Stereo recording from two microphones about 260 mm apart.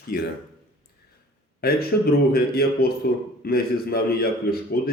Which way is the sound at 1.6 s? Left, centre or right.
Left.